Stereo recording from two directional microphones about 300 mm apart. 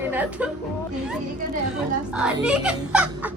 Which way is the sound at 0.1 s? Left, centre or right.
Centre.